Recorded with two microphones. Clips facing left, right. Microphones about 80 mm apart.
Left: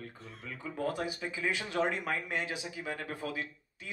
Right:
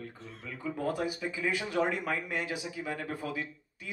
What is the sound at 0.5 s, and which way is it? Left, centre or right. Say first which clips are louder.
A man's voice: right 2 dB; right.